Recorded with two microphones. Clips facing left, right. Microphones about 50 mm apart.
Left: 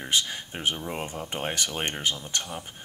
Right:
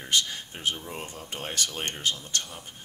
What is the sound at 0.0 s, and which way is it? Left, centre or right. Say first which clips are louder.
Speech: even; centre.